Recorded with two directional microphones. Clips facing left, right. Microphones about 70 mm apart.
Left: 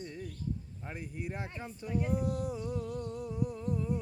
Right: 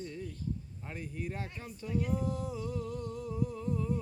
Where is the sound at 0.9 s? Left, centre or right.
Centre.